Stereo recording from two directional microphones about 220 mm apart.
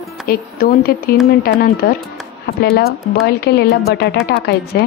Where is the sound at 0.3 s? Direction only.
45° left (ahead or behind).